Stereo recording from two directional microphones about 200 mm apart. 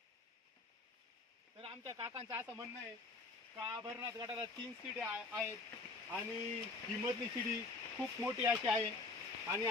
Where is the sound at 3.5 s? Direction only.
15° right (ahead or behind).